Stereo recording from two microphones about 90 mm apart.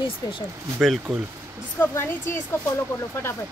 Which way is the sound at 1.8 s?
30° left (ahead or behind).